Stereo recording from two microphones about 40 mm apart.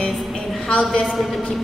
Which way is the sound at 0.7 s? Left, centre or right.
Left.